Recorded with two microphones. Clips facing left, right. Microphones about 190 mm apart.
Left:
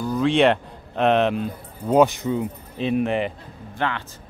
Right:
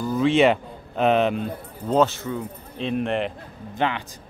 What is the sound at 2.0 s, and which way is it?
Speech, 15° left (ahead or behind).